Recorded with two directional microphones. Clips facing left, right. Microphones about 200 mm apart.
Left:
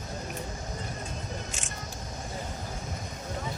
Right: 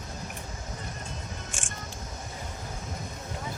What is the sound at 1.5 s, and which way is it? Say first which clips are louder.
Music: even; 50° right (ahead or behind).